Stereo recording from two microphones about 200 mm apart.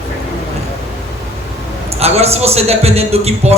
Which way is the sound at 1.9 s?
30° right (ahead or behind).